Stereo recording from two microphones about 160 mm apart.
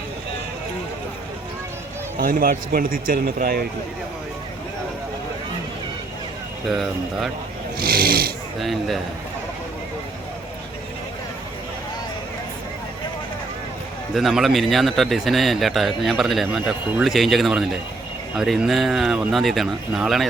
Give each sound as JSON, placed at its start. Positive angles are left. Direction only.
{"t": 2.1, "sound": "speech", "side_deg": -65}
{"t": 6.7, "sound": "speech", "side_deg": 0}
{"t": 7.8, "sound": "speech", "side_deg": -70}
{"t": 8.5, "sound": "speech", "side_deg": 0}
{"t": 14.1, "sound": "speech", "side_deg": 0}